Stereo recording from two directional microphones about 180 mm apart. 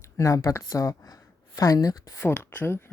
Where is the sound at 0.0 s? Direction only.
15° left (ahead or behind).